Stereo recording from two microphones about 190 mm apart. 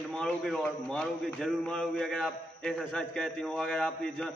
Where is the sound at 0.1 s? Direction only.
5° left (ahead or behind).